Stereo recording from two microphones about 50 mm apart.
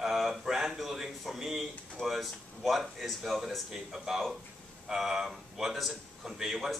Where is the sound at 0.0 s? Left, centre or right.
Centre.